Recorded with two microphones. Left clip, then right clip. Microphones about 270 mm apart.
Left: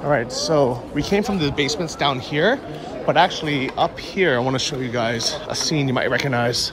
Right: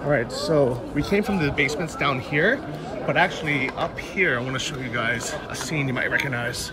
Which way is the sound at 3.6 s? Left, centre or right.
Centre.